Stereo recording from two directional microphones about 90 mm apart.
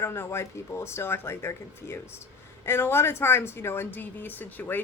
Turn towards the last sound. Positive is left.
turn(degrees=20)  # may be behind; listen again after turning